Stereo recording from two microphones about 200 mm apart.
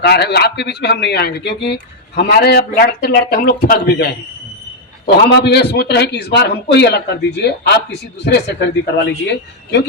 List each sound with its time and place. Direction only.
0.0 s a man's voice: 55° left (ahead or behind)
5.3 s a man's voice: 55° left (ahead or behind)